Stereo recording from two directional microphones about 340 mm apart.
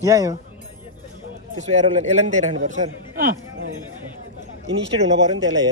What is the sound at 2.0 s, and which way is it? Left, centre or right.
Speech, centre.